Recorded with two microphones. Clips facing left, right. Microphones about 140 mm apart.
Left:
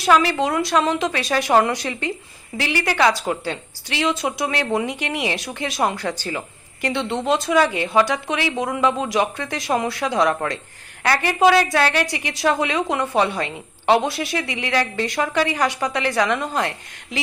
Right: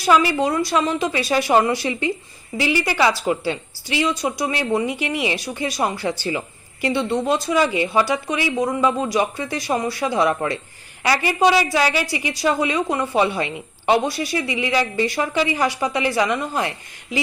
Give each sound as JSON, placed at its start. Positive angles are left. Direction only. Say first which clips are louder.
{"t": 0.0, "sound": "speech", "louder": "even", "side_deg": 0}
{"t": 1.8, "sound": "a woman's voice", "louder": "right 3 dB", "side_deg": 60}
{"t": 2.7, "sound": "speech", "louder": "left 2 dB", "side_deg": 0}
{"t": 5.0, "sound": "a woman's voice", "louder": "right 1 dB", "side_deg": 60}
{"t": 5.4, "sound": "speech", "louder": "even", "side_deg": 0}